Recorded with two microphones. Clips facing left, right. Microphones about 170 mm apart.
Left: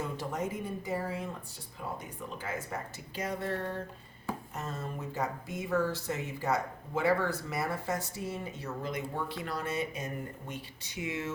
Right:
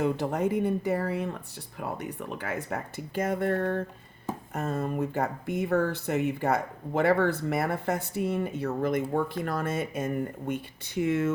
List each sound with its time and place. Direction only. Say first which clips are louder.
0.0 s speech: right 8 dB; 65° right (ahead or behind)